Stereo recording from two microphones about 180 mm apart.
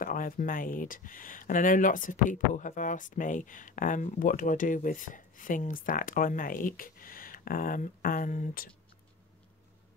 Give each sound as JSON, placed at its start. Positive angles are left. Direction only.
{"t": 0.0, "sound": "speech", "side_deg": 50}